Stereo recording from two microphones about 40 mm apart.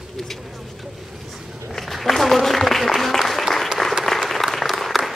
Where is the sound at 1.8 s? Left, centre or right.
Centre.